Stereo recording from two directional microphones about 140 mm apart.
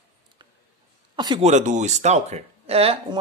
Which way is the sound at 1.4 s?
55° right (ahead or behind).